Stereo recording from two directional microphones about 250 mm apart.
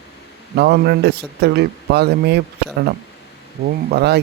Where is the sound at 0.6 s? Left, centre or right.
Right.